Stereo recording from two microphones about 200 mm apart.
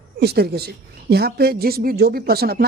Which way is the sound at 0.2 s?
55° right (ahead or behind).